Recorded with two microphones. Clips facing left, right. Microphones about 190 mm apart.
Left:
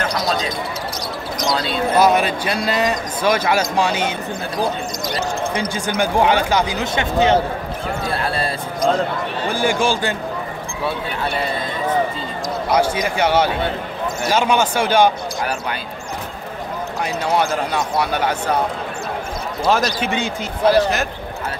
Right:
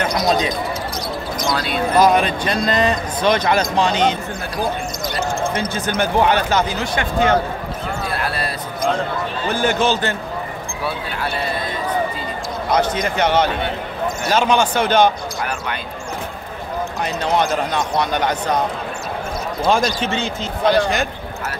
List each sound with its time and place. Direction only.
2.0 s a man's voice: 10° left (ahead or behind)
5.5 s a man's voice: 15° left (ahead or behind)
8.1 s basketball bounce: 30° left (ahead or behind)
9.5 s a man's voice: 10° left (ahead or behind)
12.7 s a man's voice: 10° left (ahead or behind)
17.0 s a man's voice: 10° left (ahead or behind)
19.6 s a man's voice: 5° left (ahead or behind)